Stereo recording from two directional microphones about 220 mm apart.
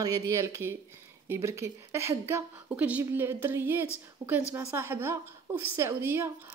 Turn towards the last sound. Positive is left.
turn(degrees=-10)  # may be behind; listen again after turning